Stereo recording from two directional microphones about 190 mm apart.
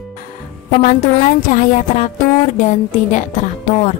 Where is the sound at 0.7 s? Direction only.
40° left (ahead or behind).